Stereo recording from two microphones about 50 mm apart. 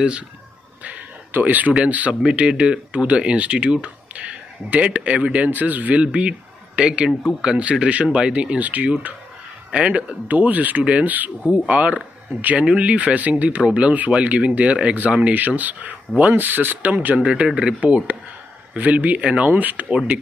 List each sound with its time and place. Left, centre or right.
0.8 s a sound: right
1.9 s speech: right
17.0 s speech: right